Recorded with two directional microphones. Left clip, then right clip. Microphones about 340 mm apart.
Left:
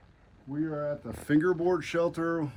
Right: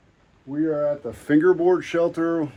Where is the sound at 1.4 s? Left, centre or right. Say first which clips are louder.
Right 9 dB; right.